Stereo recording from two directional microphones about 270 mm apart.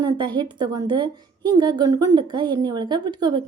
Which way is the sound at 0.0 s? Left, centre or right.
Centre.